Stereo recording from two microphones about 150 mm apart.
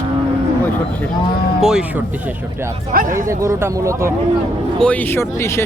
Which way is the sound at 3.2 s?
20° right (ahead or behind).